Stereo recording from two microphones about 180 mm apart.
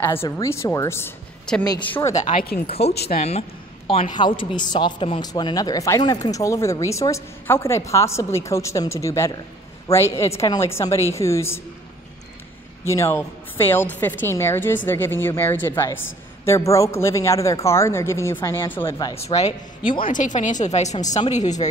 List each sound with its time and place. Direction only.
0.4 s a woman's voice: 15° left (ahead or behind); by 2.9 s 35° left (ahead or behind)
2.9 s speech: 65° left (ahead or behind)
3.2 s a woman's voice: 35° left (ahead or behind); by 11.6 s 15° left (ahead or behind)
12.8 s a woman's voice: 15° left (ahead or behind)
20.1 s speech: 45° left (ahead or behind)